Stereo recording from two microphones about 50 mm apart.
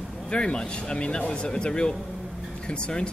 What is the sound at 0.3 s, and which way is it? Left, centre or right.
Speech, left.